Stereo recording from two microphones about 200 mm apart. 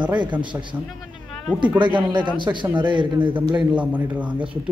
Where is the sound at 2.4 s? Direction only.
20° right (ahead or behind).